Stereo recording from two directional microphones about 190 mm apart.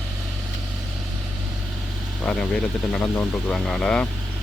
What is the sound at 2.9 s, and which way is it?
Speech, 5° left (ahead or behind).